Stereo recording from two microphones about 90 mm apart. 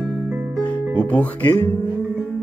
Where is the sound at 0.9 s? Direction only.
15° left (ahead or behind).